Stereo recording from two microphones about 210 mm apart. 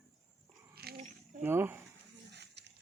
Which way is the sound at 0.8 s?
45° right (ahead or behind).